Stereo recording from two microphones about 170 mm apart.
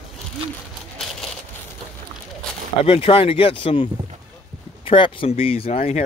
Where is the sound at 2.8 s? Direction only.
35° left (ahead or behind).